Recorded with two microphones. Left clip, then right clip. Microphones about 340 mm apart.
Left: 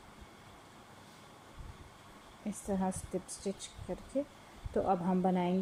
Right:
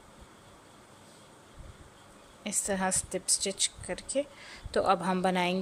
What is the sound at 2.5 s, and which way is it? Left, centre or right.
A woman's voice, right.